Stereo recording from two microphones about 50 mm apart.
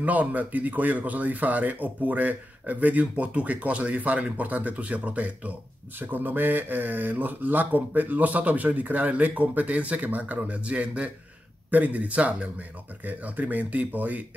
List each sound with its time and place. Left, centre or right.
0.0 s a man's voice: right